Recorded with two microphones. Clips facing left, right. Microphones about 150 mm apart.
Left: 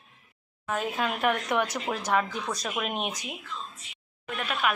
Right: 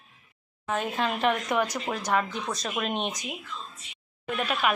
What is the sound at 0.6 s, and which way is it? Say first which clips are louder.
Speech: right 1 dB; centre (ahead or behind).